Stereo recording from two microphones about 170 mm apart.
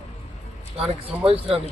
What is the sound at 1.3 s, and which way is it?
Speech, 35° right (ahead or behind).